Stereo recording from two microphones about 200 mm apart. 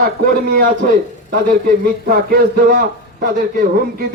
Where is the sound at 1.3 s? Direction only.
45° right (ahead or behind).